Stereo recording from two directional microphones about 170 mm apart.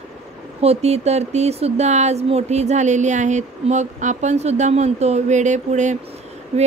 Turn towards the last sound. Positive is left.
turn(degrees=-35)  # may be behind; listen again after turning